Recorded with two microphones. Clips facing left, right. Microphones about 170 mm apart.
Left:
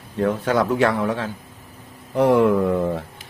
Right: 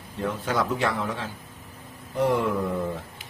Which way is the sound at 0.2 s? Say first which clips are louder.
Left 7 dB; 60° left (ahead or behind).